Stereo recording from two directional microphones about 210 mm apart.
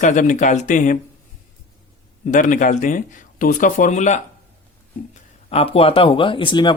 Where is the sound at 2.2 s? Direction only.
35° left (ahead or behind).